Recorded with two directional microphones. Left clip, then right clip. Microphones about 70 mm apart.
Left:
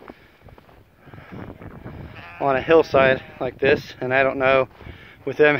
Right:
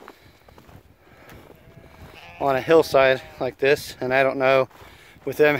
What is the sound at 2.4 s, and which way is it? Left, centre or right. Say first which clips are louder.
Speech: left 1 dB; right.